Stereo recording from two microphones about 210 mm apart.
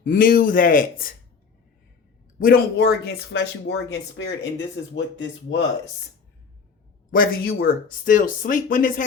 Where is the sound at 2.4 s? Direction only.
45° left (ahead or behind).